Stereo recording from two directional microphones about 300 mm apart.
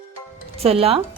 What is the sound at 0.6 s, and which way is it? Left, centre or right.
Speech, centre.